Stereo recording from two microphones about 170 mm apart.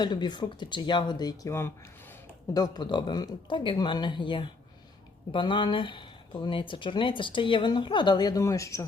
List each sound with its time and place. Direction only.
0.0 s speech: 25° left (ahead or behind)